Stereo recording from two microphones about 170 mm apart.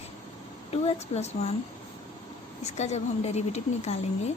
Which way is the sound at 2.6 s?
40° left (ahead or behind).